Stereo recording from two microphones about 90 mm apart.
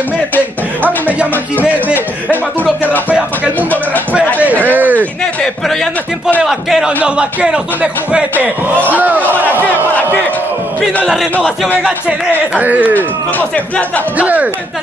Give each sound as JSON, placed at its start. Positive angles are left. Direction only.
{"t": 2.8, "sound": "speech", "side_deg": 20}
{"t": 3.5, "sound": "a sound", "side_deg": 20}
{"t": 4.4, "sound": "a sound", "side_deg": -20}
{"t": 5.2, "sound": "a man's voice", "side_deg": 5}
{"t": 12.3, "sound": "speech", "side_deg": -15}
{"t": 12.9, "sound": "speech", "side_deg": 20}
{"t": 14.1, "sound": "speech", "side_deg": -15}